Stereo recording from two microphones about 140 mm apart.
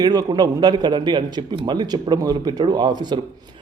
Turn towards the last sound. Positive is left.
turn(degrees=-30)  # may be behind; listen again after turning